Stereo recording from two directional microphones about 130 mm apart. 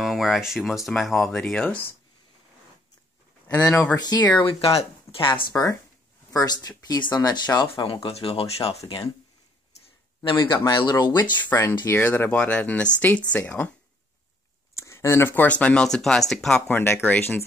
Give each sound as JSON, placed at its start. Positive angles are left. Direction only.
{"t": 0.0, "sound": "speech", "side_deg": 0}
{"t": 3.5, "sound": "speech", "side_deg": 25}
{"t": 4.4, "sound": "speech", "side_deg": 45}
{"t": 5.5, "sound": "speech", "side_deg": 25}
{"t": 10.7, "sound": "speech", "side_deg": 35}
{"t": 11.1, "sound": "speech", "side_deg": 15}
{"t": 14.7, "sound": "speech", "side_deg": 20}
{"t": 16.7, "sound": "speech", "side_deg": 15}